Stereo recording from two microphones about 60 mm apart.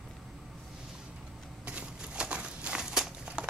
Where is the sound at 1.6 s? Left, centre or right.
Centre.